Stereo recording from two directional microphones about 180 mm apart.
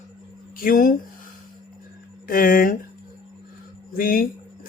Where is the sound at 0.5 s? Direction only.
50° left (ahead or behind).